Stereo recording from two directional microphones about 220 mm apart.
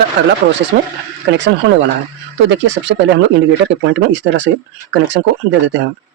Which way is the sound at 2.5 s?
55° right (ahead or behind).